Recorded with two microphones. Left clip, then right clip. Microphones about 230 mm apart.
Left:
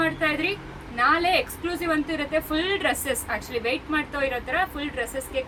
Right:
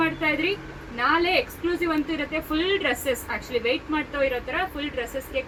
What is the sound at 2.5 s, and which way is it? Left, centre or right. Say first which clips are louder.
Speech: right 4 dB; left.